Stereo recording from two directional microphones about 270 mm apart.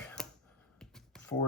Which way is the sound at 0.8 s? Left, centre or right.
Centre.